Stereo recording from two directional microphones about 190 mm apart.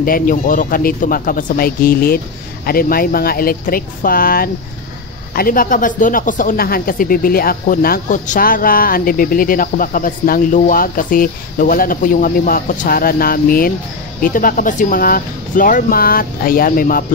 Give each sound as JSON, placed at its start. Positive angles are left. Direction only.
{"t": 0.0, "sound": "speech", "side_deg": 45}